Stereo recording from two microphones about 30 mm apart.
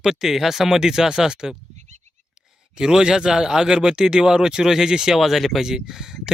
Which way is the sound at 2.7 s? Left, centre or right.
Right.